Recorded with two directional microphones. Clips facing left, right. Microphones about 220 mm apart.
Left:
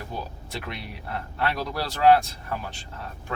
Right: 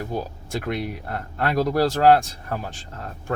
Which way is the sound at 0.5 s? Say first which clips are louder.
Right 10 dB; 50° right (ahead or behind).